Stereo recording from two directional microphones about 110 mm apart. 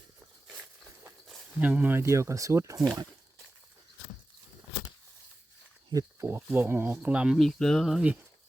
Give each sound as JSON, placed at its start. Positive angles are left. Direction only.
{"t": 1.6, "sound": "speech", "side_deg": -15}
{"t": 2.0, "sound": "speech", "side_deg": -25}
{"t": 5.9, "sound": "speech", "side_deg": -25}
{"t": 7.3, "sound": "speech", "side_deg": 0}